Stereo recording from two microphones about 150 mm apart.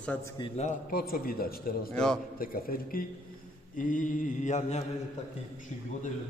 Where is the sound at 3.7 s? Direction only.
60° left (ahead or behind).